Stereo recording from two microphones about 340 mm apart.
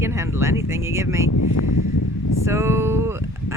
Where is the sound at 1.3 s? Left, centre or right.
Left.